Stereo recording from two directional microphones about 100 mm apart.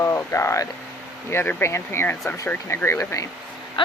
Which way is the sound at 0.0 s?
25° left (ahead or behind).